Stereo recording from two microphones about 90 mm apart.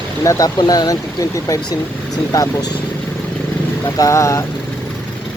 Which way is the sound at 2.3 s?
40° left (ahead or behind).